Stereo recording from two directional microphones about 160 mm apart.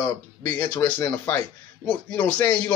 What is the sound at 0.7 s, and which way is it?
A man's voice, 10° left (ahead or behind).